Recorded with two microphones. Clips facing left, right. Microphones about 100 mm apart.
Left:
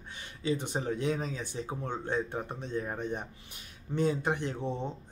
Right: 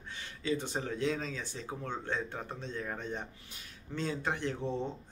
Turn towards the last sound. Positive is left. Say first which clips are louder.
# even
turn(degrees=15)  # may be behind; listen again after turning